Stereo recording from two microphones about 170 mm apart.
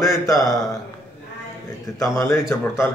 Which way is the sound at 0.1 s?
Centre (ahead or behind).